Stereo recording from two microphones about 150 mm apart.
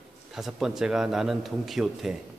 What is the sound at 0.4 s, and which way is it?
Speech, 5° right (ahead or behind).